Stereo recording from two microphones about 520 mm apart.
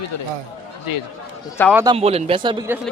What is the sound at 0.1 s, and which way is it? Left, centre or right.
Speech, left.